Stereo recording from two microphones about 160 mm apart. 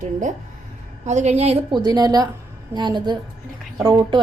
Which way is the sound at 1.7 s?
25° right (ahead or behind).